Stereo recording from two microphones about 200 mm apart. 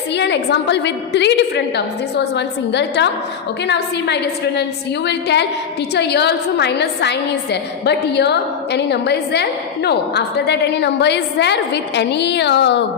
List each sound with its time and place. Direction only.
0.1 s a woman's voice: 60° left (ahead or behind)